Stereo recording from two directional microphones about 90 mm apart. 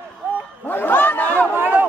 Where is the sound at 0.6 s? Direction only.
20° left (ahead or behind).